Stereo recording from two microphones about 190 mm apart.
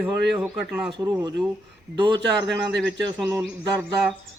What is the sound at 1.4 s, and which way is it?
Speech, 5° right (ahead or behind).